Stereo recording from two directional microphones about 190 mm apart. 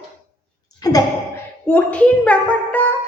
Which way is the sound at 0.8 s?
20° left (ahead or behind).